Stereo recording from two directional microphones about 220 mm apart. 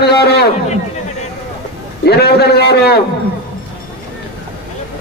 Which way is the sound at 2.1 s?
45° left (ahead or behind).